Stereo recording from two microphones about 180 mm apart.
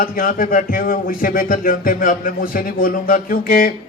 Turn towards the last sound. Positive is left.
turn(degrees=50)  # may be behind; listen again after turning